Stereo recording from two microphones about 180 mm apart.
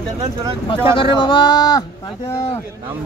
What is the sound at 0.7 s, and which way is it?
Speech, 30° left (ahead or behind).